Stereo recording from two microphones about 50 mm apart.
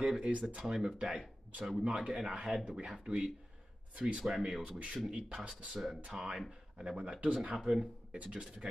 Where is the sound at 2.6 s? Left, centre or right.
Centre.